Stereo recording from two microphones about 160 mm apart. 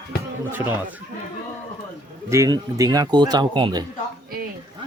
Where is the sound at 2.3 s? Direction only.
20° right (ahead or behind).